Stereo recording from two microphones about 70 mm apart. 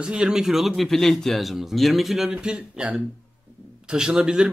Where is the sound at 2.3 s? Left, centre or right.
Centre.